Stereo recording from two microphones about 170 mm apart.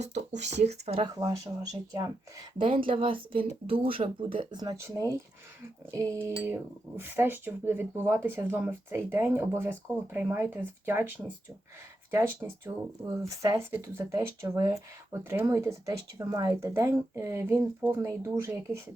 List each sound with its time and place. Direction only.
0.0 s speech: 40° right (ahead or behind); by 18.8 s 15° right (ahead or behind)